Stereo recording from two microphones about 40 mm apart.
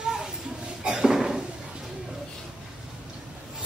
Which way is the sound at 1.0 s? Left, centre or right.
Centre.